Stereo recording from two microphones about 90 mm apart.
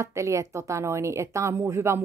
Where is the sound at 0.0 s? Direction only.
35° right (ahead or behind).